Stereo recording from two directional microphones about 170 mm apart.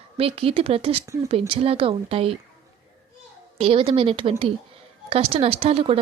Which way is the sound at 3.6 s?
30° right (ahead or behind).